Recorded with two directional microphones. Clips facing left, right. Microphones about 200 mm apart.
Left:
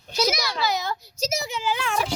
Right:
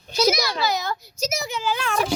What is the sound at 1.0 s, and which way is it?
Speech, 30° left (ahead or behind).